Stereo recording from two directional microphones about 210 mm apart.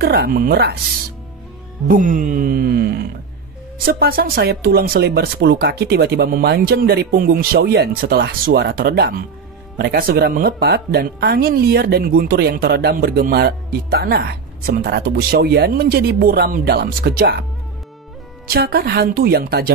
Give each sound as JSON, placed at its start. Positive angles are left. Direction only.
{"t": 0.0, "sound": "a woman's voice", "side_deg": -50}
{"t": 1.9, "sound": "a woman's voice", "side_deg": -40}
{"t": 18.5, "sound": "a woman's voice", "side_deg": -45}